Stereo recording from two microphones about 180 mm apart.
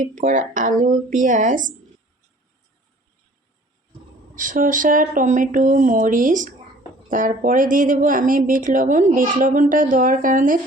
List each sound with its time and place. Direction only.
0.0 s speech: 45° right (ahead or behind)
4.4 s speech: 45° right (ahead or behind)